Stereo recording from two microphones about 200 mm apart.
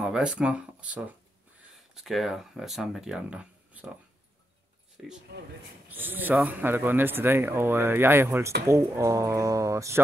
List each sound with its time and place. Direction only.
0.0 s speech: 5° right (ahead or behind)
5.3 s speech: 55° right (ahead or behind)
5.9 s speech: 10° right (ahead or behind)